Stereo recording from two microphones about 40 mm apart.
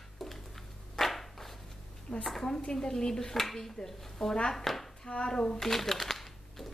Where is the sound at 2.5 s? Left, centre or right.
Centre.